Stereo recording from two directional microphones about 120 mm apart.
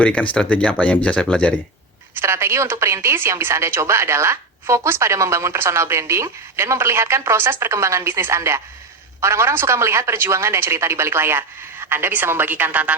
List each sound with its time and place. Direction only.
0.0 s speech: 10° left (ahead or behind)
2.1 s a woman's voice: 20° right (ahead or behind)